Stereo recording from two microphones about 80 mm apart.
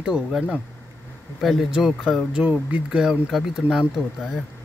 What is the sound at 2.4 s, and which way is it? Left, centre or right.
Speech, centre.